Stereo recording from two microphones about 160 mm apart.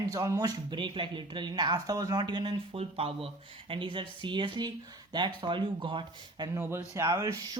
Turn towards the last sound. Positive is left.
turn(degrees=-20)  # may be behind; listen again after turning